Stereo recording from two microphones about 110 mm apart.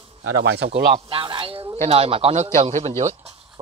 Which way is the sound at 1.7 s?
65° right (ahead or behind).